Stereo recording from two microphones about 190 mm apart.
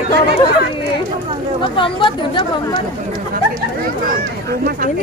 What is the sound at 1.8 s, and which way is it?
Speech, 25° left (ahead or behind).